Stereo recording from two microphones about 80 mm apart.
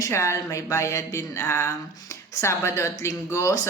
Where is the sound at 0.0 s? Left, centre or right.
Left.